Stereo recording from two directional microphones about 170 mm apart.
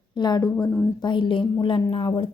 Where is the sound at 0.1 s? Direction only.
25° left (ahead or behind).